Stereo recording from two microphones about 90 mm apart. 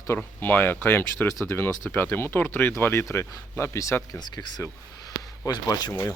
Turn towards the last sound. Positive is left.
turn(degrees=45)  # may be behind; listen again after turning